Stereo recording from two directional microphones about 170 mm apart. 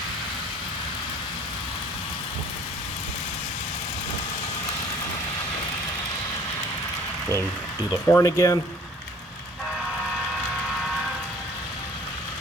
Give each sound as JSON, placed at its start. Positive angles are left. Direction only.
{"t": 8.1, "sound": "speech", "side_deg": 20}